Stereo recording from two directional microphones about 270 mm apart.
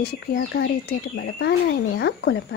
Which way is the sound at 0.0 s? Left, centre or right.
Left.